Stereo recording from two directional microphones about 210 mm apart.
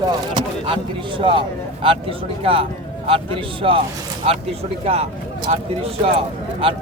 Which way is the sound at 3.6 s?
25° right (ahead or behind).